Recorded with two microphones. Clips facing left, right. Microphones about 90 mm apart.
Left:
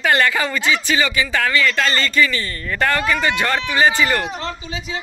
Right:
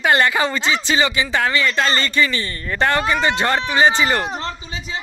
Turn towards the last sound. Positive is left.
turn(degrees=-35)  # may be behind; listen again after turning